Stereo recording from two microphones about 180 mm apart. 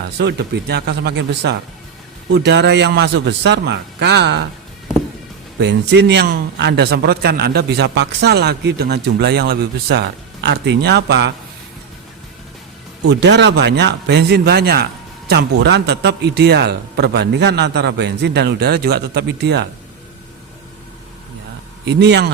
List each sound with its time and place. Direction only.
0.0 s a man's voice: 65° right (ahead or behind)
5.5 s a man's voice: 70° right (ahead or behind)
13.1 s a man's voice: 70° right (ahead or behind)
21.8 s a man's voice: 70° right (ahead or behind)